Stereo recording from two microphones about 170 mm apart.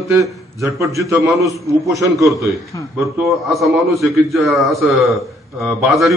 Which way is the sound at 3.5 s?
Centre (ahead or behind).